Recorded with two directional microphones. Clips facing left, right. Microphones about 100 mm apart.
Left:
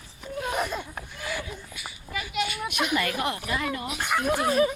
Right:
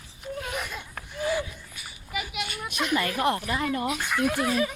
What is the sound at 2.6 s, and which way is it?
Children playing, 10° left (ahead or behind).